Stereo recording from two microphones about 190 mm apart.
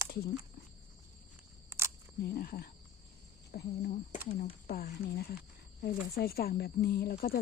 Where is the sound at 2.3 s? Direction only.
50° left (ahead or behind).